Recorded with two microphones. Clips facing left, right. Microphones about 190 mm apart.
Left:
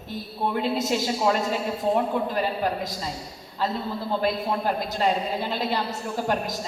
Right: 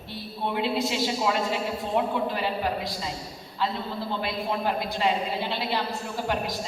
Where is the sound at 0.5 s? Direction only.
45° left (ahead or behind).